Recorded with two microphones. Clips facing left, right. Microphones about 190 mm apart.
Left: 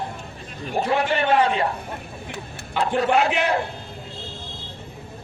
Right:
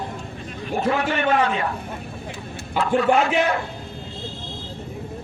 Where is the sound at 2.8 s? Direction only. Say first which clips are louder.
Right 1 dB; 35° left (ahead or behind).